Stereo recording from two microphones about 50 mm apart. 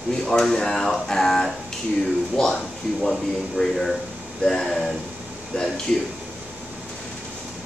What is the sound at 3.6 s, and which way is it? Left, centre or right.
Speech, centre.